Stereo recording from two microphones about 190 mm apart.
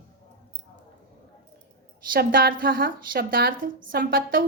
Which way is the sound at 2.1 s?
50° right (ahead or behind).